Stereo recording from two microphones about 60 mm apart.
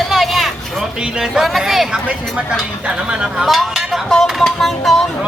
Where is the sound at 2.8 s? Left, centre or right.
Centre.